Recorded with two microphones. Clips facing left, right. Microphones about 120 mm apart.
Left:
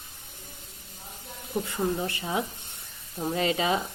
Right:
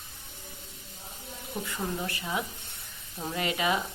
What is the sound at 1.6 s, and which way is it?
Speech, 25° left (ahead or behind).